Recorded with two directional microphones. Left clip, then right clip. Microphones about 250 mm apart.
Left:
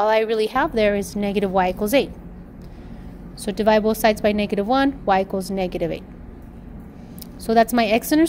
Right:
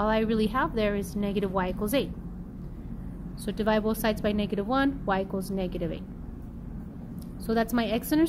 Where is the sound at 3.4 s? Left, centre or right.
Left.